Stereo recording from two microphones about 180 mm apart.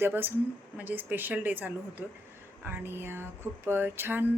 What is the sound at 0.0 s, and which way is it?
A woman's voice, 10° right (ahead or behind).